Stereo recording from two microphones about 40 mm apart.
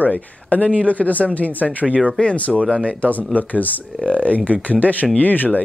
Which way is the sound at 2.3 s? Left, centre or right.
Left.